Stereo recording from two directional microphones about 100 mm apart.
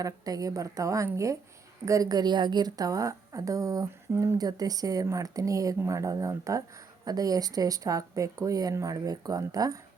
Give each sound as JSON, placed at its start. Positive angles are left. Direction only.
{"t": 0.0, "sound": "speech", "side_deg": -35}
{"t": 4.4, "sound": "speech", "side_deg": -40}